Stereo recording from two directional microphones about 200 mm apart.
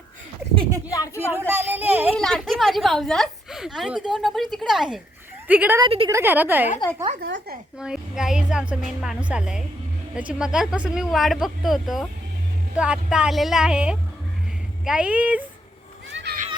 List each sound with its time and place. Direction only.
0.9 s speech: 15° left (ahead or behind)
1.3 s speech: 10° right (ahead or behind)
2.1 s a woman's voice: centre (ahead or behind)
5.8 s a woman's voice: 25° right (ahead or behind)
6.1 s speech: 10° right (ahead or behind)
7.2 s speech: 55° right (ahead or behind)
7.8 s a woman's voice: 5° right (ahead or behind)
16.1 s a sound: 55° right (ahead or behind)